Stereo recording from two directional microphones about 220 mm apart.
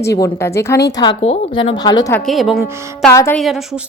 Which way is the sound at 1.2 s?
25° left (ahead or behind).